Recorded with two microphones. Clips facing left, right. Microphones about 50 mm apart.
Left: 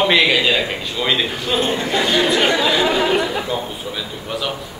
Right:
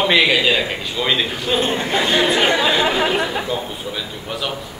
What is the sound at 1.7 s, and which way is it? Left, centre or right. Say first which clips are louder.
A man's voice: even; right.